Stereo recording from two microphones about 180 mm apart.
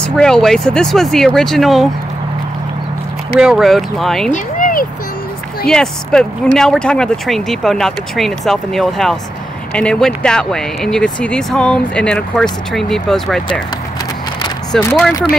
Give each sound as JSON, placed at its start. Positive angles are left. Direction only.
{"t": 0.0, "sound": "speech", "side_deg": 5}
{"t": 3.3, "sound": "speech", "side_deg": 0}
{"t": 4.3, "sound": "a sound", "side_deg": 50}
{"t": 5.7, "sound": "speech", "side_deg": 5}
{"t": 14.7, "sound": "speech", "side_deg": 5}